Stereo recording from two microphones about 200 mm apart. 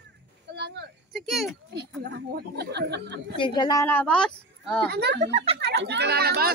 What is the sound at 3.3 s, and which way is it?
Speech, 25° left (ahead or behind).